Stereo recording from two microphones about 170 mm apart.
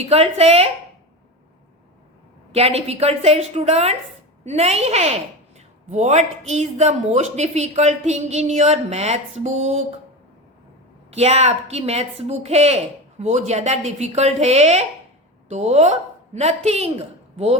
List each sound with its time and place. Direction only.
0.1 s speech: 35° right (ahead or behind)
2.5 s speech: 35° right (ahead or behind)
11.1 s a woman's voice: 40° right (ahead or behind)